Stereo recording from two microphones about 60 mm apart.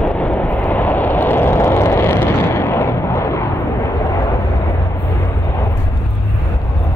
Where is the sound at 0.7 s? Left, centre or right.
Left.